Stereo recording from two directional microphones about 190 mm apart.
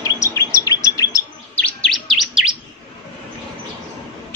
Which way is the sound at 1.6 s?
5° left (ahead or behind).